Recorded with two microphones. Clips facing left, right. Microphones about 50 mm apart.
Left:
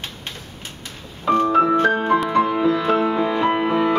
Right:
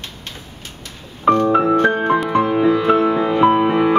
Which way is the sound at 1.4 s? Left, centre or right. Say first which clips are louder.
Right 2 dB; right.